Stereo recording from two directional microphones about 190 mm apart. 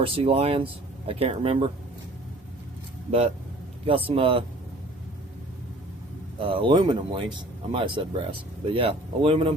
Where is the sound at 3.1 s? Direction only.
35° right (ahead or behind).